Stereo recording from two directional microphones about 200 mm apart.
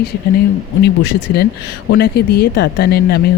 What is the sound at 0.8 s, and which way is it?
Speech, 55° left (ahead or behind).